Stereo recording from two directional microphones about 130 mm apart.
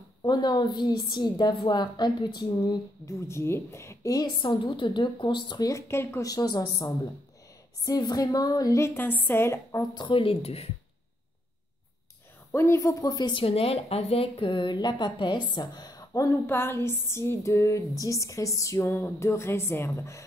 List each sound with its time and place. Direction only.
0.2 s a woman's voice: 35° left (ahead or behind)
5.7 s speech: 20° left (ahead or behind); by 10.7 s 50° left (ahead or behind)
12.5 s speech: 20° left (ahead or behind)